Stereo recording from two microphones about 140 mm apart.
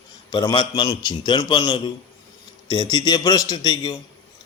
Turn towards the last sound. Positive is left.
turn(degrees=30)  # may be behind; listen again after turning